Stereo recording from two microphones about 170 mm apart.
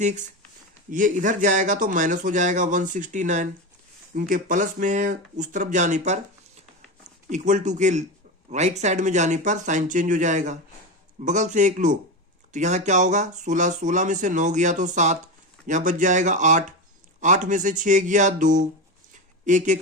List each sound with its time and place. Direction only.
0.0 s speech: 45° right (ahead or behind)
7.3 s speech: 45° right (ahead or behind)